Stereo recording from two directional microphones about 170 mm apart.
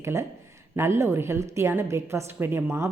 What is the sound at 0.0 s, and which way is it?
A woman's voice, 15° right (ahead or behind).